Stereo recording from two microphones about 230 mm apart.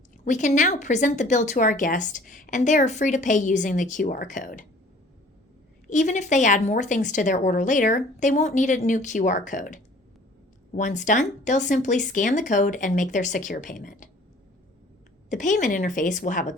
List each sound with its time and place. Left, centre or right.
0.3 s a woman's voice: left
5.9 s a woman's voice: left
15.3 s a woman's voice: left